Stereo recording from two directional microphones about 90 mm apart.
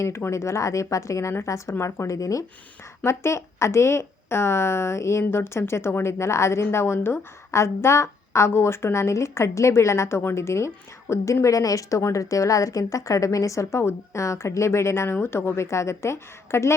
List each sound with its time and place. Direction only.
0.0 s speech: 30° left (ahead or behind)